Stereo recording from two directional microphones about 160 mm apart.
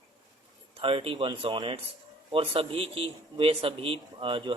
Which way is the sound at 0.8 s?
35° right (ahead or behind).